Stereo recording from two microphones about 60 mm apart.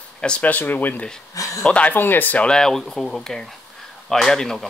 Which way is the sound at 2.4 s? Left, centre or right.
Centre.